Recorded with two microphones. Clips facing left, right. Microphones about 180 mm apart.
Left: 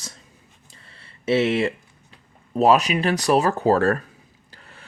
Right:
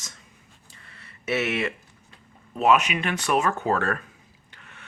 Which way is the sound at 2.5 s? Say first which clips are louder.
Left 4 dB; 35° left (ahead or behind).